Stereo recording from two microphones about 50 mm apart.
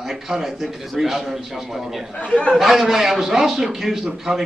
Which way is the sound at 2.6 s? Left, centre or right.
Centre.